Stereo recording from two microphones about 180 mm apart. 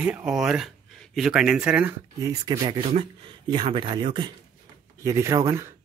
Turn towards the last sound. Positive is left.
turn(degrees=-15)  # may be behind; listen again after turning